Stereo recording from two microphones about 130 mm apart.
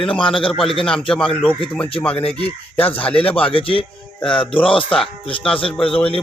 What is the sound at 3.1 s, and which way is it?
Speech, 10° left (ahead or behind).